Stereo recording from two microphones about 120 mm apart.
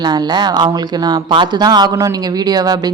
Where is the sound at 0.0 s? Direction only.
35° right (ahead or behind).